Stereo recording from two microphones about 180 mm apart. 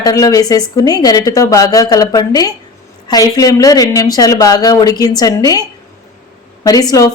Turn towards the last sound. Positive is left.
turn(degrees=20)  # may be behind; listen again after turning